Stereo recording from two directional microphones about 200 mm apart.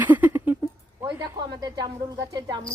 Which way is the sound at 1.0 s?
20° right (ahead or behind).